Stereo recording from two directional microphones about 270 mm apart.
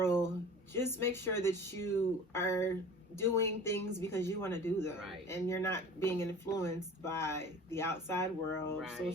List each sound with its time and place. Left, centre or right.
0.0 s a sound: centre
0.7 s speech: centre
8.8 s speech: centre